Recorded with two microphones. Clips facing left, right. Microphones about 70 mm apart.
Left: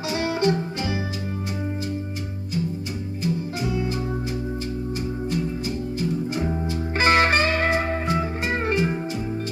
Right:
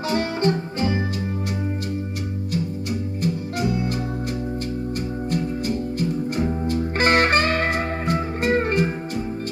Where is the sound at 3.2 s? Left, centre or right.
Right.